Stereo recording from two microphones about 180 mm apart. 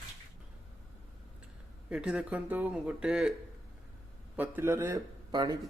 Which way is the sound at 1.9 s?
5° right (ahead or behind).